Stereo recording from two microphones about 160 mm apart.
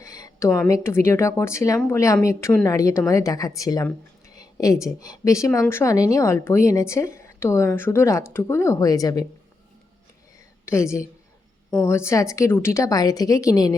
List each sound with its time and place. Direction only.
0.0 s a sound: 20° left (ahead or behind)
0.7 s a woman's voice: 15° left (ahead or behind)
10.7 s a woman's voice: 20° left (ahead or behind)